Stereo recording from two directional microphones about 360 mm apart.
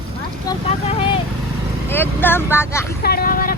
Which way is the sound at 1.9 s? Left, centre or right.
Centre.